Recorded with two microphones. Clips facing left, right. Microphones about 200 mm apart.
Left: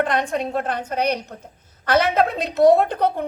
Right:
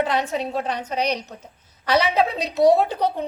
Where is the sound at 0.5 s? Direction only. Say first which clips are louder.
Left 1 dB; 55° left (ahead or behind).